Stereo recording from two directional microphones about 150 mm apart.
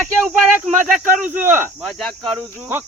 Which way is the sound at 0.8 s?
60° right (ahead or behind).